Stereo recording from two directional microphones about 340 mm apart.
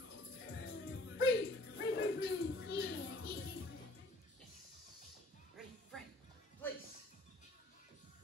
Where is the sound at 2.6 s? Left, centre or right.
Left.